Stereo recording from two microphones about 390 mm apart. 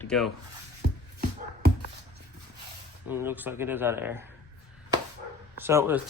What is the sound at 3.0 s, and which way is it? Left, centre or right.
Speech, centre.